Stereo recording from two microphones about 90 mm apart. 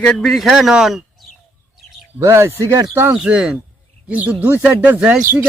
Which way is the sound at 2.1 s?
30° right (ahead or behind).